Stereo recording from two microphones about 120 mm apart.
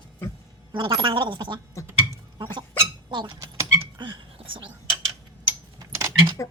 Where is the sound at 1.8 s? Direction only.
25° right (ahead or behind).